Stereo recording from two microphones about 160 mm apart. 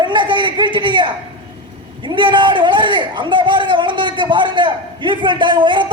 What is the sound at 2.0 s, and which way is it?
A man's voice, 30° right (ahead or behind).